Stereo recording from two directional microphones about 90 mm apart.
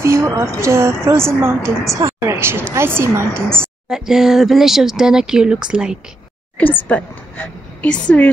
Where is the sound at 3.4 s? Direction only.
10° left (ahead or behind).